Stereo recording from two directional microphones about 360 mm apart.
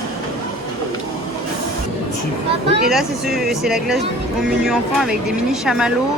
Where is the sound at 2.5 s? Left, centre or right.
Centre.